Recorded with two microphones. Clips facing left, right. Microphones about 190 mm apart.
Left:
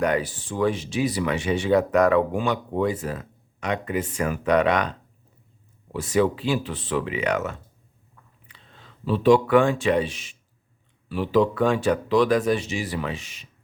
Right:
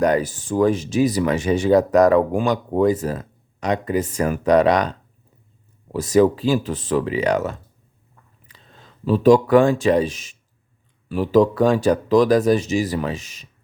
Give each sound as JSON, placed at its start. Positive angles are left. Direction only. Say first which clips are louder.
{"t": 0.0, "sound": "speech", "louder": "right 5 dB", "side_deg": -40}